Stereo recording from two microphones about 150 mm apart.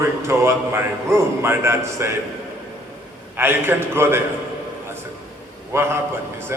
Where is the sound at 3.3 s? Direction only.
15° right (ahead or behind).